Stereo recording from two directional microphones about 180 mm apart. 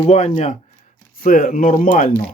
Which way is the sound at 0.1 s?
40° left (ahead or behind).